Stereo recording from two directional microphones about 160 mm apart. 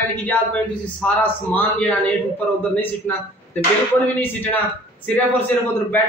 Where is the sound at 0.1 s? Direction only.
10° left (ahead or behind).